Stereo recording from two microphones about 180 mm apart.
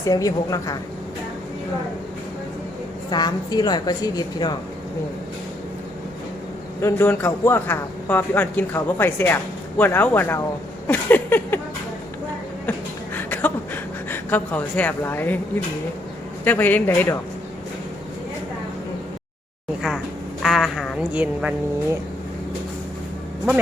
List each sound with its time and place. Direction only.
0.0 s a woman's voice: 20° left (ahead or behind)
3.1 s a woman's voice: 25° left (ahead or behind)
6.8 s a man's voice: 10° left (ahead or behind)
10.8 s a sound: 10° left (ahead or behind)
13.1 s a sound: 10° left (ahead or behind)
14.1 s a man's voice: 10° left (ahead or behind)
16.4 s a man's voice: 10° left (ahead or behind)
20.4 s a woman's voice: centre (ahead or behind)